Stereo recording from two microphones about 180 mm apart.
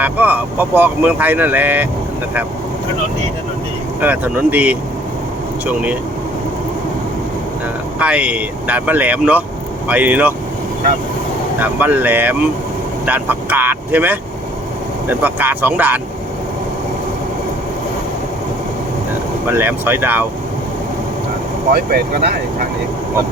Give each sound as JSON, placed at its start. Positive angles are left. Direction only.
{"t": 0.0, "sound": "speech", "side_deg": -10}
{"t": 4.0, "sound": "speech", "side_deg": -10}
{"t": 7.9, "sound": "speech", "side_deg": -5}
{"t": 11.6, "sound": "speech", "side_deg": -10}
{"t": 19.5, "sound": "speech", "side_deg": -10}
{"t": 21.7, "sound": "speech", "side_deg": -60}